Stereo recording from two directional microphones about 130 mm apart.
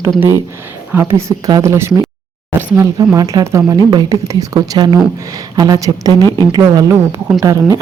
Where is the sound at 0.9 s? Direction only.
20° right (ahead or behind).